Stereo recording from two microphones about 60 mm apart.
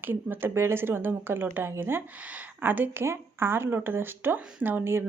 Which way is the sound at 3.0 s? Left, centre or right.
Right.